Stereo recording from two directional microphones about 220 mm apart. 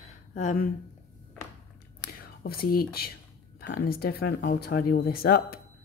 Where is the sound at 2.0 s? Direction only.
40° left (ahead or behind).